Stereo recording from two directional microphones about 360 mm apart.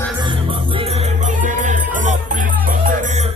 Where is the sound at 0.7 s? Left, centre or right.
Centre.